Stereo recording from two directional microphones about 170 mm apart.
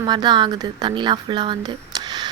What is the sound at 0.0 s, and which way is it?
Speech, 25° right (ahead or behind).